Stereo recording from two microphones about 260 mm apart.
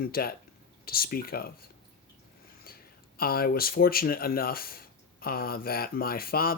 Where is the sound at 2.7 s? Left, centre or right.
Left.